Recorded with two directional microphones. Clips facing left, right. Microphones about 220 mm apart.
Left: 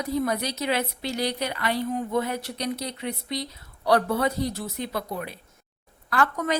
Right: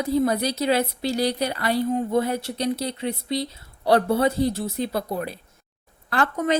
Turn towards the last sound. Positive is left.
turn(degrees=-25)  # may be behind; listen again after turning